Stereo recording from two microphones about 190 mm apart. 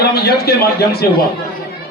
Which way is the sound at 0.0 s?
55° left (ahead or behind).